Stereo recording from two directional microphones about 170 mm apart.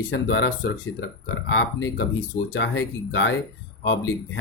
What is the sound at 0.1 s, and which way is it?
Speech, 90° left.